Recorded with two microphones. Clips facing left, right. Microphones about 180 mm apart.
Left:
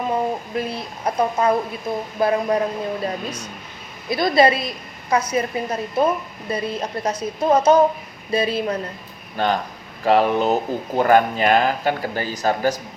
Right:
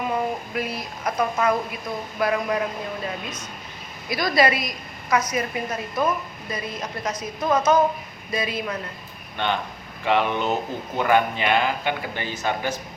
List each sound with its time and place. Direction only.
0.1 s a woman's voice: 30° left (ahead or behind)